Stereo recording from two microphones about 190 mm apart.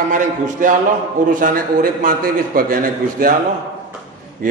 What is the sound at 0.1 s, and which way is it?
A man's voice, 45° right (ahead or behind).